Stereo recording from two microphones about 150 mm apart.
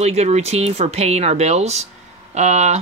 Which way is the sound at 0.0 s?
45° right (ahead or behind).